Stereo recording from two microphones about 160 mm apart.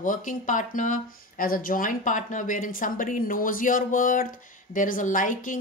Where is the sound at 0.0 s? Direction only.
55° left (ahead or behind).